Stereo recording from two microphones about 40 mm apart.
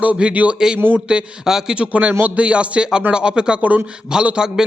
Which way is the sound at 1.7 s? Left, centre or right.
Right.